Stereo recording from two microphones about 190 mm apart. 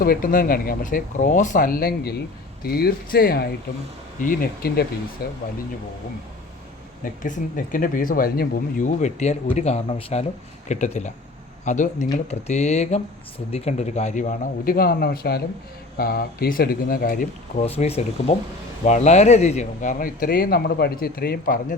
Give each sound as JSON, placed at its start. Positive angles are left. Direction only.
{"t": 0.0, "sound": "speech", "side_deg": 50}
{"t": 7.0, "sound": "a man's voice", "side_deg": 40}
{"t": 17.7, "sound": "a man's voice", "side_deg": 30}